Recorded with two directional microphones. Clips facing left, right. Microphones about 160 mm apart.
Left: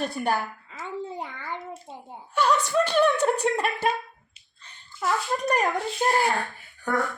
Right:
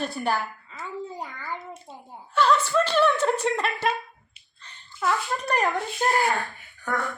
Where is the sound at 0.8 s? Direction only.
25° left (ahead or behind).